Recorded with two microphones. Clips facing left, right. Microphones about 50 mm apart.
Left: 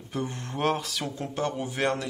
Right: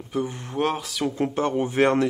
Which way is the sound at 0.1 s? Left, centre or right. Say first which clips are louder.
Right 5 dB; centre.